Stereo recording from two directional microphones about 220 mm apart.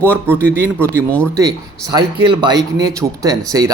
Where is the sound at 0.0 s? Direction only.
10° right (ahead or behind).